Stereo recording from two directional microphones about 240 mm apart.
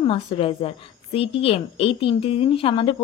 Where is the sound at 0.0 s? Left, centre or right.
Left.